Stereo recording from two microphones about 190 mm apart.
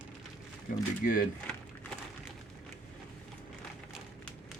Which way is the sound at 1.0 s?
45° left (ahead or behind).